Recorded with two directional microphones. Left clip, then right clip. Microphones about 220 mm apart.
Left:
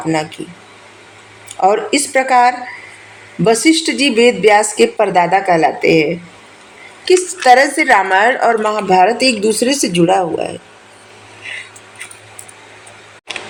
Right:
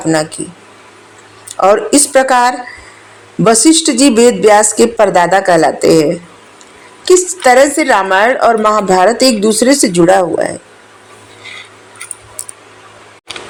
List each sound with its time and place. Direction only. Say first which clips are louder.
0.1 s a woman's voice: right 5 dB; 25° right (ahead or behind)
1.5 s a woman's voice: right 4 dB; 25° right (ahead or behind)
7.4 s a woman's voice: right 1 dB; 25° right (ahead or behind)